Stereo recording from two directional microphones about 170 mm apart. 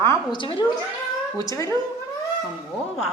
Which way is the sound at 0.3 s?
25° left (ahead or behind).